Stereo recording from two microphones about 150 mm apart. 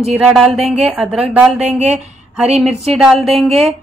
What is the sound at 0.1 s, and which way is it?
Speech, centre (ahead or behind).